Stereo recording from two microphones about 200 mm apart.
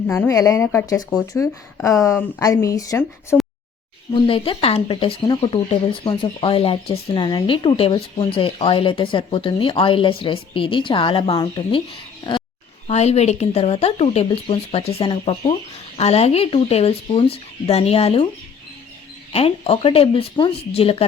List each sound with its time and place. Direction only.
0.1 s speech: 15° left (ahead or behind)
4.1 s speech: 25° left (ahead or behind)
19.3 s speech: 30° left (ahead or behind)